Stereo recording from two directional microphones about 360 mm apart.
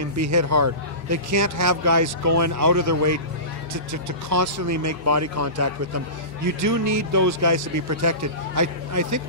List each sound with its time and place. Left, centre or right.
0.2 s a man's voice: right